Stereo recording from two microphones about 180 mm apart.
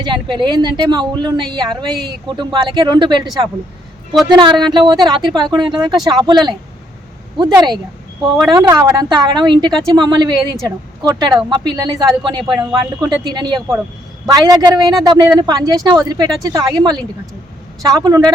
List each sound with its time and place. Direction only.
0.0 s a woman's voice: 25° right (ahead or behind)